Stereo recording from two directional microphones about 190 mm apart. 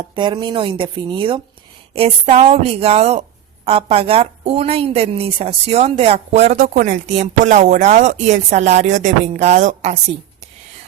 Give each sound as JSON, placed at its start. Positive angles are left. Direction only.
{"t": 0.0, "sound": "speech", "side_deg": -25}